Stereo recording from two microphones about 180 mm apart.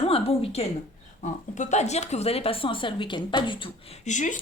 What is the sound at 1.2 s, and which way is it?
Speech, 40° left (ahead or behind).